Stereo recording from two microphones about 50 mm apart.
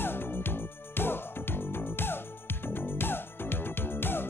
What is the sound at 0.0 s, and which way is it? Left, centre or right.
Music, left.